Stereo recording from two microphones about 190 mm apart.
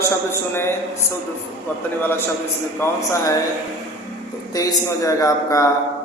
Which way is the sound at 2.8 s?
15° left (ahead or behind).